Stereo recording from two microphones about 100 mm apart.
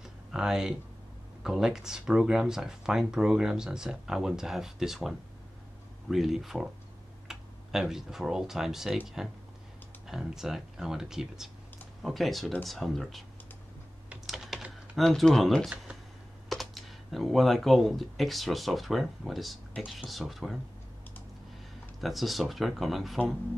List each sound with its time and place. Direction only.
0.3 s speech: 5° right (ahead or behind)
14.2 s typing: 5° right (ahead or behind)
16.4 s speech: centre (ahead or behind)
22.0 s speech: centre (ahead or behind)